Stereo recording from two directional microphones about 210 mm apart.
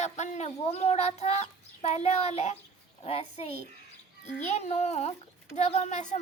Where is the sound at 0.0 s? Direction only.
30° left (ahead or behind).